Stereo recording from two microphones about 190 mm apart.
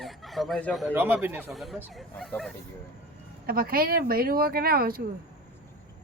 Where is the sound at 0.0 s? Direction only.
Centre (ahead or behind).